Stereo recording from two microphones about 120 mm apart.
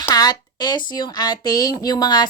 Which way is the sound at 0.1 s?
30° left (ahead or behind).